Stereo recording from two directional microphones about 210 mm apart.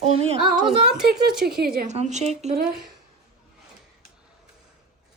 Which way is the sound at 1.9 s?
35° right (ahead or behind).